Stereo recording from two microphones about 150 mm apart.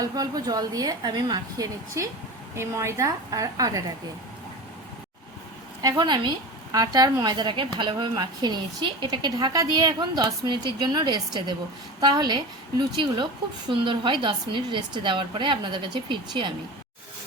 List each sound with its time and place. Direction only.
0.0 s a woman's voice: 25° right (ahead or behind)
6.0 s a woman's voice: 30° right (ahead or behind)
13.7 s a woman's voice: 35° right (ahead or behind)